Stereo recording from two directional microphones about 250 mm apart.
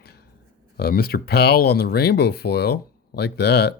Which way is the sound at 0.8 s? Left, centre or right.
Left.